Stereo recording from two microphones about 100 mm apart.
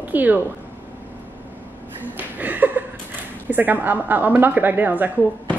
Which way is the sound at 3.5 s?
15° right (ahead or behind).